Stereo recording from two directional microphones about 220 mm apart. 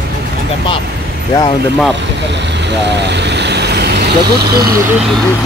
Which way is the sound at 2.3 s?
50° right (ahead or behind).